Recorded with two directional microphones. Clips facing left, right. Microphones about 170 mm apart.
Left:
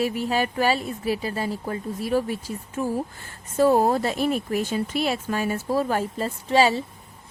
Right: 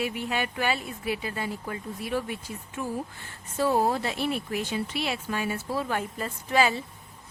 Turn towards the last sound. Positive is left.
turn(degrees=30)  # may be behind; listen again after turning